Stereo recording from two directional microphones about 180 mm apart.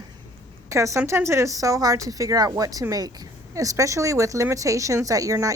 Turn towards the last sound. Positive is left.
turn(degrees=-20)  # may be behind; listen again after turning